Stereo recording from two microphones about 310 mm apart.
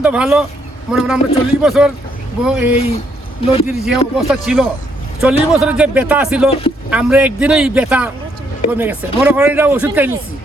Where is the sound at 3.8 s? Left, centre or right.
Centre.